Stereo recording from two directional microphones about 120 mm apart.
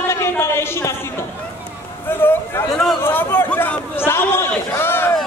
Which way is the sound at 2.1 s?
20° left (ahead or behind).